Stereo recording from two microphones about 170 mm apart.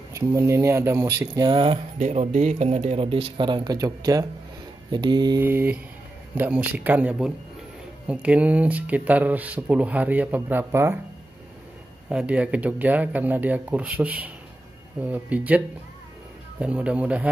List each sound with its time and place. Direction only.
0.1 s speech: 15° right (ahead or behind)
2.0 s speech: 45° right (ahead or behind); by 4.3 s 20° right (ahead or behind)
4.9 s mantra: 25° right (ahead or behind)
5.4 s speech: 10° right (ahead or behind)
12.1 s speech: 5° right (ahead or behind)